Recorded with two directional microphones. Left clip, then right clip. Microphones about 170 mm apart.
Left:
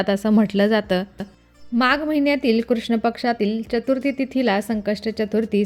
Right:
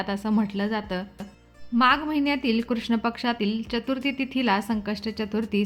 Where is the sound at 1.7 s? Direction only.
30° left (ahead or behind).